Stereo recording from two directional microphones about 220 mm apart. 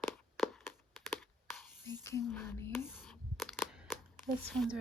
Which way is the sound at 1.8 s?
10° left (ahead or behind).